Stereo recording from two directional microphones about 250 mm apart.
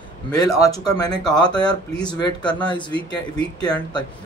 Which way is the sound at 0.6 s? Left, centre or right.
Centre.